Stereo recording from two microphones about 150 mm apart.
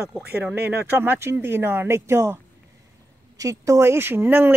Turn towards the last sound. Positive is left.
turn(degrees=-15)  # may be behind; listen again after turning